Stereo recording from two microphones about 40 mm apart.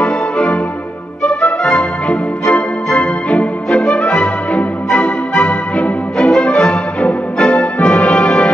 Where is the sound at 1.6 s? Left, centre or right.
Left.